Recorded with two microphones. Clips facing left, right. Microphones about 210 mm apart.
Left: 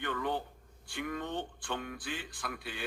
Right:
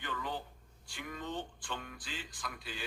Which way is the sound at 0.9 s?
60° left (ahead or behind).